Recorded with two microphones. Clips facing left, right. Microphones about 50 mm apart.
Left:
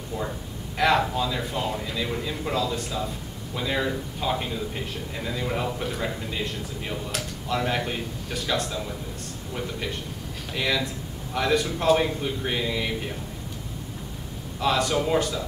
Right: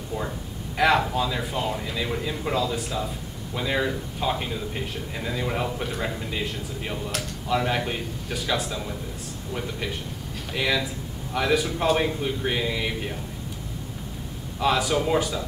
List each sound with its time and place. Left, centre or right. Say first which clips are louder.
0.7 s a man's voice: right 1 dB; centre
14.6 s a man's voice: right 1 dB; centre